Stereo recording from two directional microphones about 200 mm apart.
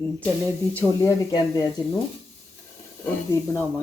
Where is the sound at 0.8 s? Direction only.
15° left (ahead or behind).